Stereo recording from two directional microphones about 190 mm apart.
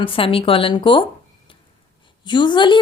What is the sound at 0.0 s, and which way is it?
Speech, 30° left (ahead or behind).